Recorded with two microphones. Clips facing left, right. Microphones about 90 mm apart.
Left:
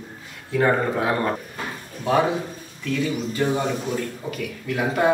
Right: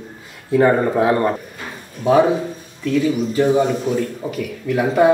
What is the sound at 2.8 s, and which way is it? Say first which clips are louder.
Speech: right 7 dB; 5° right (ahead or behind).